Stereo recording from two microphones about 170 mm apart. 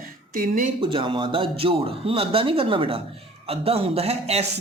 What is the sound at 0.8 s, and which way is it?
Speech, 30° right (ahead or behind).